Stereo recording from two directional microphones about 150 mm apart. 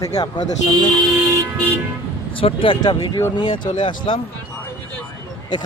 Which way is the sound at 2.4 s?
35° left (ahead or behind).